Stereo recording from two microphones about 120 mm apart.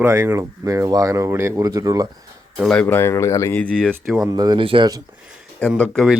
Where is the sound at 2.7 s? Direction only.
10° left (ahead or behind).